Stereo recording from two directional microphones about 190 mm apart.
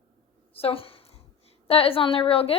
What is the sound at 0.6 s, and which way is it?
A woman's voice, 30° left (ahead or behind).